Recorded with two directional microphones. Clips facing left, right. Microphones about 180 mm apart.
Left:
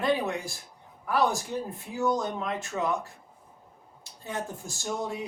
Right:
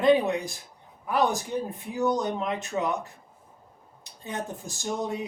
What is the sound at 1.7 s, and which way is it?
Speech, 20° right (ahead or behind).